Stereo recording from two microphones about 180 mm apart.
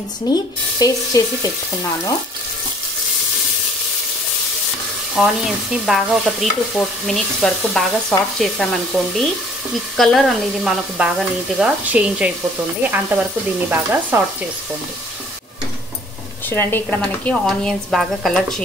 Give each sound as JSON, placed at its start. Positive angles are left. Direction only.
{"t": 0.3, "sound": "speech", "side_deg": 20}
{"t": 5.1, "sound": "stir", "side_deg": -5}
{"t": 9.9, "sound": "stir", "side_deg": 0}
{"t": 12.8, "sound": "speech", "side_deg": -10}
{"t": 16.4, "sound": "stir", "side_deg": 10}